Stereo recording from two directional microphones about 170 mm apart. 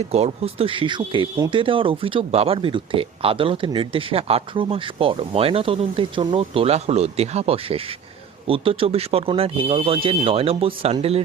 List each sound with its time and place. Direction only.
0.1 s speech: 35° right (ahead or behind)